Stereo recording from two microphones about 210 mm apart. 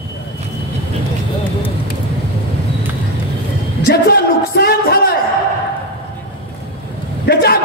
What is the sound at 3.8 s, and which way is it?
Speech, 45° left (ahead or behind).